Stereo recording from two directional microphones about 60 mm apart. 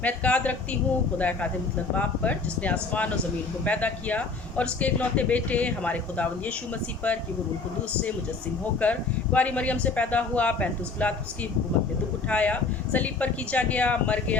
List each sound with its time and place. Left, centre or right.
0.0 s speech: left
8.8 s speech: left
12.3 s speech: left